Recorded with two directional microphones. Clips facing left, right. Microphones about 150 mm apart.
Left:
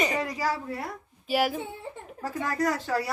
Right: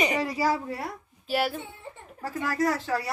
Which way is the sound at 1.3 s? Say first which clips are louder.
Left 2 dB; 10° left (ahead or behind).